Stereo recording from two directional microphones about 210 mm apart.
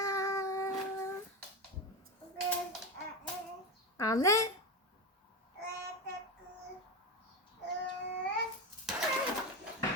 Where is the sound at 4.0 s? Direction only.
15° left (ahead or behind).